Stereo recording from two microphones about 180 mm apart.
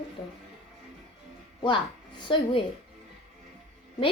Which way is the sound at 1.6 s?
25° left (ahead or behind).